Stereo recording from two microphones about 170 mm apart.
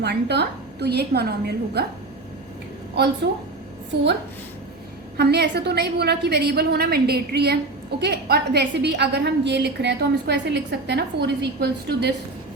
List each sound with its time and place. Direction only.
0.0 s a woman's voice: 75° right (ahead or behind)
5.1 s a woman's voice: 75° right (ahead or behind)